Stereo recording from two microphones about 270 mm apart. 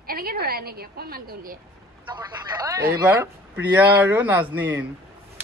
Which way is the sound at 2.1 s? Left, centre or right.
Centre.